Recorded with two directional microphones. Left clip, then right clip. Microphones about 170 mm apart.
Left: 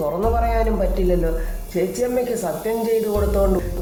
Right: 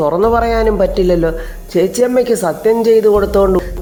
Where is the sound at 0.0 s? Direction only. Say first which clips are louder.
Right 9 dB; 35° right (ahead or behind).